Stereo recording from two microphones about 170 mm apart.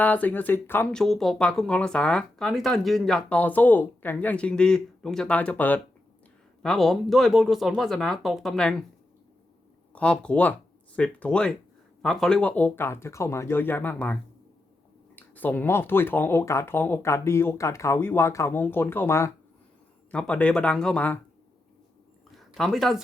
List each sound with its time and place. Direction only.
0.0 s speech: 10° left (ahead or behind)
9.9 s speech: 5° left (ahead or behind)
22.4 s a sound: centre (ahead or behind)